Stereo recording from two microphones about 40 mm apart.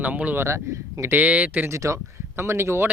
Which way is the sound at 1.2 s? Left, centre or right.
Right.